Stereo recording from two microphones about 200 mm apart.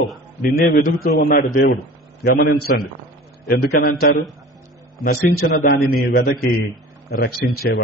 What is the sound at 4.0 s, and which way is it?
A man's voice, 50° left (ahead or behind).